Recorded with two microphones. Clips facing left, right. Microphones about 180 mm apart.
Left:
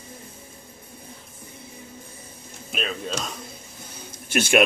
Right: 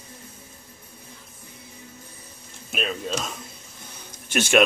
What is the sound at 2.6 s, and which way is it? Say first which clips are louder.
Speech: right 1 dB; centre (ahead or behind).